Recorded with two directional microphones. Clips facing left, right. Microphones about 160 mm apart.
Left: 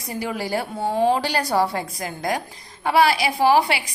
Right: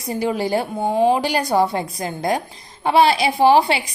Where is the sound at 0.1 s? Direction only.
25° right (ahead or behind).